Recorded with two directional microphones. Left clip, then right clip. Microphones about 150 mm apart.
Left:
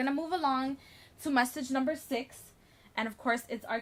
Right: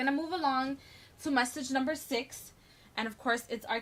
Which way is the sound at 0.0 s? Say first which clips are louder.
Even; 55° left (ahead or behind).